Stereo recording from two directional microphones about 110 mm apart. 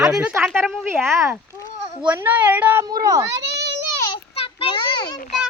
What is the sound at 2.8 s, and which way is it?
Speech, 35° right (ahead or behind).